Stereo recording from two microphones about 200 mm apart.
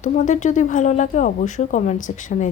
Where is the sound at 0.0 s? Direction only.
40° left (ahead or behind).